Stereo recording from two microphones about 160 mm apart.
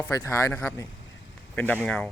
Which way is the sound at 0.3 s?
20° left (ahead or behind).